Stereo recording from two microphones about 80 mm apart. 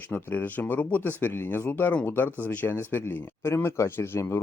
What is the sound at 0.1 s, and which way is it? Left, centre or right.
Speech, left.